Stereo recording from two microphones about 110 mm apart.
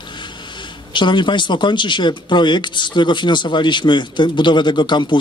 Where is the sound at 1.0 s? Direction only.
45° left (ahead or behind).